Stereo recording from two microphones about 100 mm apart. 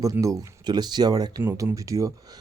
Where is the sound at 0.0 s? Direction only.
35° right (ahead or behind).